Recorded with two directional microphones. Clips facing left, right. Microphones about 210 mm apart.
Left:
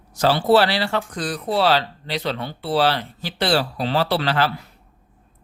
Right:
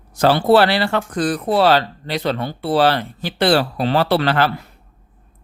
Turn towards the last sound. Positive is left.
turn(degrees=-55)  # may be behind; listen again after turning